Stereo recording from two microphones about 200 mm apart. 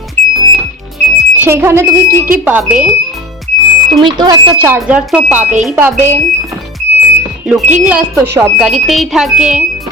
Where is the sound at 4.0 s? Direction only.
25° right (ahead or behind).